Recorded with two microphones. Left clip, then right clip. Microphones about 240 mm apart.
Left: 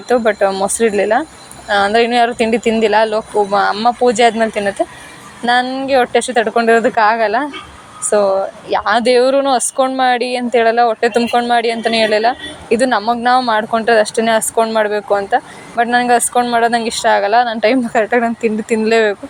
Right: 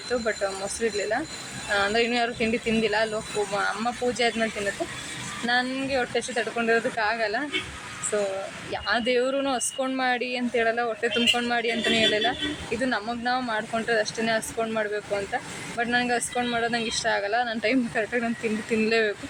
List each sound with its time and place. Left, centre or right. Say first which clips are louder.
0.1 s speech: left 14 dB; centre
5.6 s speech: left 13 dB; centre